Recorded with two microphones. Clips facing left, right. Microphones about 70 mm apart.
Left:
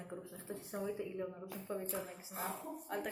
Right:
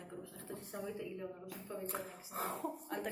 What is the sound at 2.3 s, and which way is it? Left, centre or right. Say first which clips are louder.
Speech: right 2 dB; right.